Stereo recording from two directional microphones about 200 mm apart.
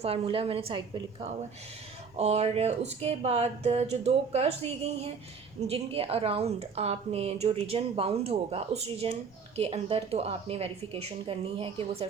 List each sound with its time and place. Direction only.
0.0 s a woman's voice: 30° right (ahead or behind)